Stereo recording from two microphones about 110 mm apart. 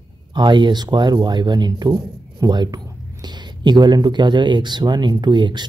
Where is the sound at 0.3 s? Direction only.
45° right (ahead or behind).